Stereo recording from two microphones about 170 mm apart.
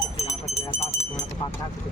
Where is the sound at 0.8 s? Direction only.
15° left (ahead or behind).